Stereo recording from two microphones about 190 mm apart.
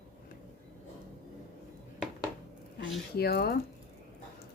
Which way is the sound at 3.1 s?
55° left (ahead or behind).